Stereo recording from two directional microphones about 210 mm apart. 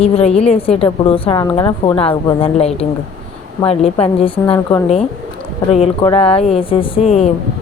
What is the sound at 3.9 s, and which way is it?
Speech, 25° left (ahead or behind).